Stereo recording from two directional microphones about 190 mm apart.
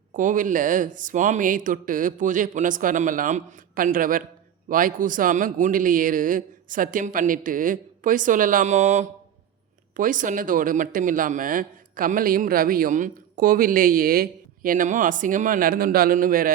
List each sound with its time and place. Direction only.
0.1 s speech: 45° right (ahead or behind)